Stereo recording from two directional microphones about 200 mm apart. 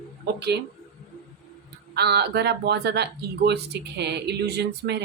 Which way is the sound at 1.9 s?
55° right (ahead or behind).